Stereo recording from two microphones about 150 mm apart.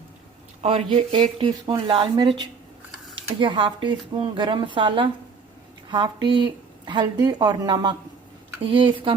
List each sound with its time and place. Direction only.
0.6 s a woman's voice: 40° right (ahead or behind)